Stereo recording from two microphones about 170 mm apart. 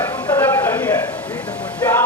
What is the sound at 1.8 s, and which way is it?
Music, 15° left (ahead or behind).